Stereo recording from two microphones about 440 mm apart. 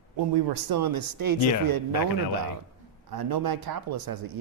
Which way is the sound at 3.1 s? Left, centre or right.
Right.